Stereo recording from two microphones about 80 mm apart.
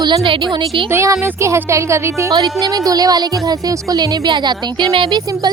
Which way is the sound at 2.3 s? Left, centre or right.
Right.